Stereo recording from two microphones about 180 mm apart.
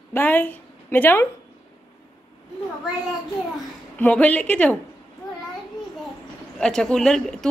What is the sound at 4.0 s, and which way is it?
Speech, 10° left (ahead or behind).